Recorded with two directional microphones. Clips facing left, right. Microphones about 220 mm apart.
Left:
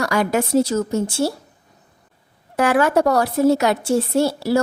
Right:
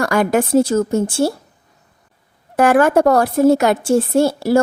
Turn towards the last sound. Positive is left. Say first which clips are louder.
# right 4 dB
turn(degrees=-50)  # may be behind; listen again after turning